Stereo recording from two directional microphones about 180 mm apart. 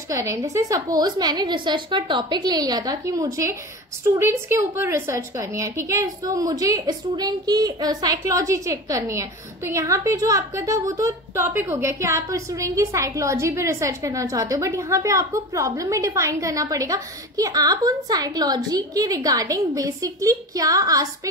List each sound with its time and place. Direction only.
0.1 s a woman's voice: 15° right (ahead or behind)